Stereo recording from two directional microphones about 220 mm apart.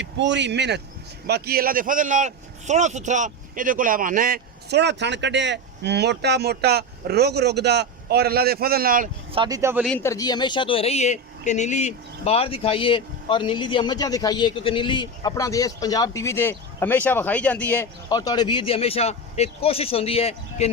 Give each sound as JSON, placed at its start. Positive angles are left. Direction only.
{"t": 0.0, "sound": "a man's voice", "side_deg": -55}
{"t": 9.3, "sound": "speech", "side_deg": -20}
{"t": 9.8, "sound": "speech", "side_deg": 10}